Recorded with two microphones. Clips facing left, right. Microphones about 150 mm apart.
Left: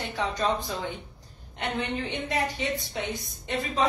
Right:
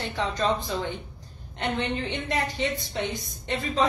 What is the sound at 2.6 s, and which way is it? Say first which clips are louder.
Speech: right 2 dB; 5° left (ahead or behind).